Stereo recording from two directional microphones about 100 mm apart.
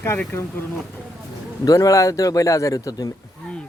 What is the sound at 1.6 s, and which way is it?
Speech, 35° left (ahead or behind).